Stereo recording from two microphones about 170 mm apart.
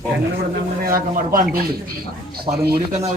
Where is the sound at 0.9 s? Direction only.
55° right (ahead or behind).